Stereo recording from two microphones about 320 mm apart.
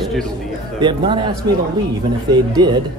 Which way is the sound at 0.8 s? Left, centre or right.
Centre.